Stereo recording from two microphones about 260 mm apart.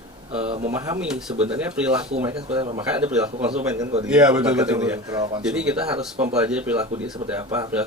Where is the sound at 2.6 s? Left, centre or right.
Centre.